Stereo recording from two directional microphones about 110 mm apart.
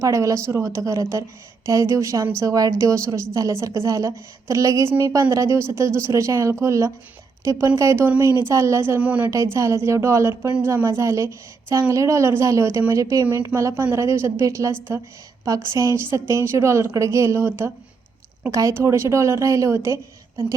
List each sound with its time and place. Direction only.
0.0 s a woman's voice: 30° right (ahead or behind)
9.0 s a woman's voice: 15° right (ahead or behind)
9.3 s a woman's voice: 25° right (ahead or behind)